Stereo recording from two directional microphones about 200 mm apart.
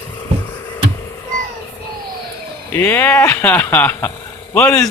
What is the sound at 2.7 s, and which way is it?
Speech, 10° left (ahead or behind).